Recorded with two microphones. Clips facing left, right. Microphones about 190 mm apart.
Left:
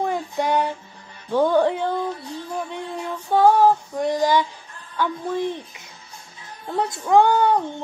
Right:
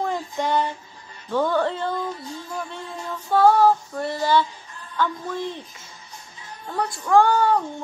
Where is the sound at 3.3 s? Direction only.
15° left (ahead or behind).